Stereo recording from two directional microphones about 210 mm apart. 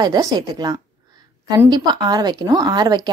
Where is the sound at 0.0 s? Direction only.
15° right (ahead or behind).